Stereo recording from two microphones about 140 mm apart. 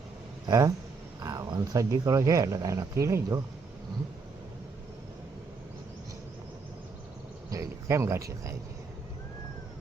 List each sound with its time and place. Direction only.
0.4 s speech: 25° right (ahead or behind)
7.5 s cricket: 20° right (ahead or behind)